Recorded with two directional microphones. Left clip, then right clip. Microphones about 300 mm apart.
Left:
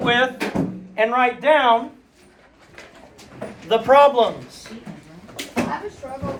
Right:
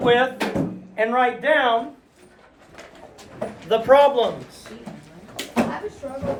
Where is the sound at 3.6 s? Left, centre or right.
Centre.